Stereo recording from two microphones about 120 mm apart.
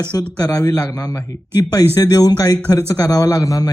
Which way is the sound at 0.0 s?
35° left (ahead or behind).